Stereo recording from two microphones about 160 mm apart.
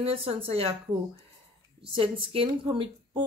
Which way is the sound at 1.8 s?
30° right (ahead or behind).